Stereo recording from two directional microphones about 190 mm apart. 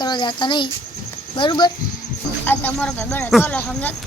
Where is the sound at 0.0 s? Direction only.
25° left (ahead or behind).